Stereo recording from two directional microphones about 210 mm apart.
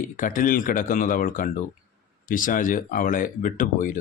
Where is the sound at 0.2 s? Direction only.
40° left (ahead or behind).